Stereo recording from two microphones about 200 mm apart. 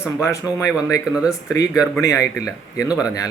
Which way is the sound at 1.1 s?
5° right (ahead or behind).